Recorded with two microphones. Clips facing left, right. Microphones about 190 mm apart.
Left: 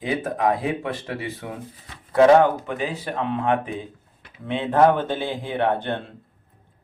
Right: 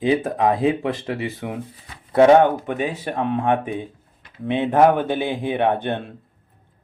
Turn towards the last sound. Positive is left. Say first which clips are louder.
# right 2 dB
turn(degrees=-20)  # may be behind; listen again after turning